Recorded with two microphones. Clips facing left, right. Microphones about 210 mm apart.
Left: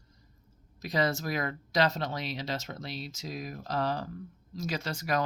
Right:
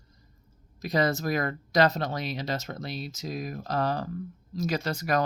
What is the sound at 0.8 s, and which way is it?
Speech, 45° right (ahead or behind).